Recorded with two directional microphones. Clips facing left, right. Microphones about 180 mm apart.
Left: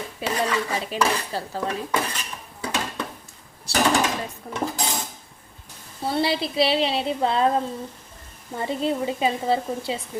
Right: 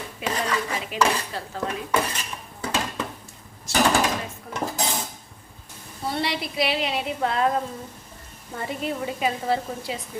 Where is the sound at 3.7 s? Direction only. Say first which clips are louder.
Right 1 dB; 35° left (ahead or behind).